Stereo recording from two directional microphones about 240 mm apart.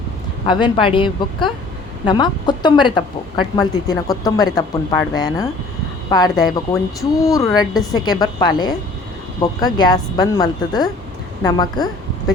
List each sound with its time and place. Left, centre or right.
0.4 s a woman's voice: centre